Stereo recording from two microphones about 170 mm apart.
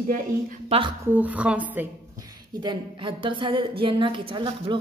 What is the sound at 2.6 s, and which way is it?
Speech, 30° right (ahead or behind).